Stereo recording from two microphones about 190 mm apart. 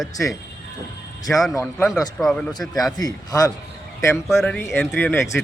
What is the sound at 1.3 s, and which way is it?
Speech, centre (ahead or behind).